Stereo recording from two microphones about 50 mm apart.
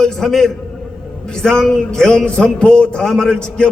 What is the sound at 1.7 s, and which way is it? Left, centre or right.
A man's voice, centre.